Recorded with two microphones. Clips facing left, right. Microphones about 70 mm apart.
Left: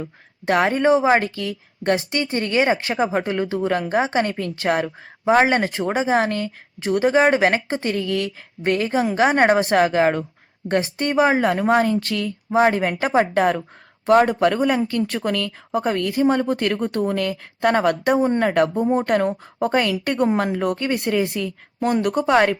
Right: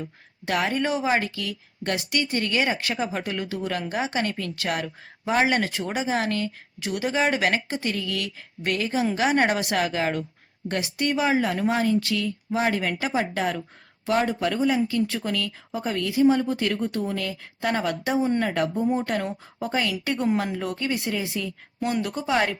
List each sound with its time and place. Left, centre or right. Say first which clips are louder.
0.0 s a woman's voice: left 7 dB; left
21.8 s speech: left 6 dB; left
22.0 s speech: left 9 dB; left